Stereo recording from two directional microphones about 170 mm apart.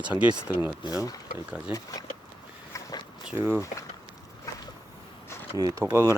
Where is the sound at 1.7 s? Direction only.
20° left (ahead or behind).